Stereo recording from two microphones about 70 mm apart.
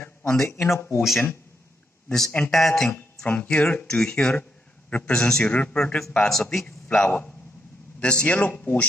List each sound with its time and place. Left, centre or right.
0.0 s a sound: centre
0.7 s speech: left
2.0 s a man's voice: centre